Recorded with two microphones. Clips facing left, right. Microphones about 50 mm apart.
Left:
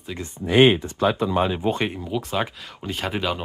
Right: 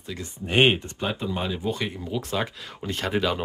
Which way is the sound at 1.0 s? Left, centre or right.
Left.